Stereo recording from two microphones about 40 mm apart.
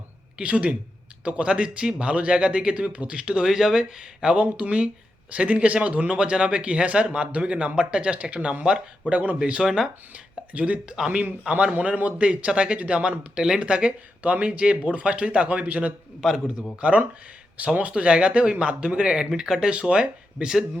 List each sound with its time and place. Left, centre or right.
0.3 s speech: right
3.4 s speech: centre
4.4 s speech: right
9.6 s a man's voice: centre
10.5 s speech: right
12.5 s speech: centre
12.7 s speech: right
13.0 s speech: right
14.2 s speech: right
16.2 s a man's voice: centre
17.7 s speech: right; by 19.7 s centre
19.7 s speech: right